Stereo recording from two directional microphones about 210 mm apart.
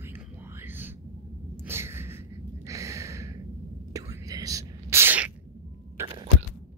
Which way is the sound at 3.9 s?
15° right (ahead or behind).